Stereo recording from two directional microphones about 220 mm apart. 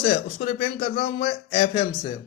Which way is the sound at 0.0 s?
30° left (ahead or behind).